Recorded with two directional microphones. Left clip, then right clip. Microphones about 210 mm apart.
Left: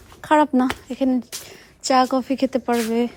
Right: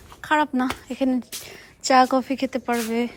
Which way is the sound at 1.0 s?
15° left (ahead or behind).